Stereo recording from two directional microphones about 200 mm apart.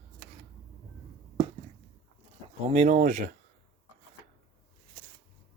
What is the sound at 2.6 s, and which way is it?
Speech, 35° right (ahead or behind).